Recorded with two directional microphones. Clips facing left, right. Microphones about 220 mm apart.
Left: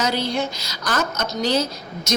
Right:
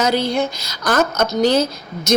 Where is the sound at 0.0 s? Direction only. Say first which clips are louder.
Right 5 dB; 50° right (ahead or behind).